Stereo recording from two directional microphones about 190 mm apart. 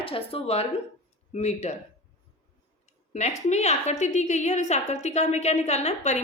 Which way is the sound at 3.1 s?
35° left (ahead or behind).